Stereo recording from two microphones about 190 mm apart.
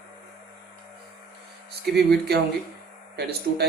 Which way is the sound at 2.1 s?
60° right (ahead or behind).